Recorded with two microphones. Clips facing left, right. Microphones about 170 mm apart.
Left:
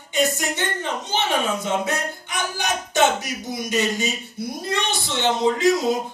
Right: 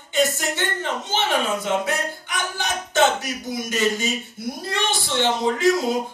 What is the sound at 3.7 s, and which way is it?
Speech, 20° left (ahead or behind).